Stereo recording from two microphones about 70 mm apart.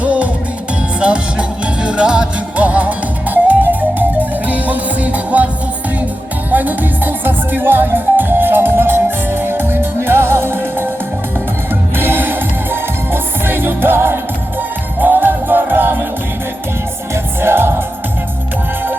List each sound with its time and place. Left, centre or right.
0.0 s music: centre
6.5 s music: right
11.9 s music: right
17.4 s music: right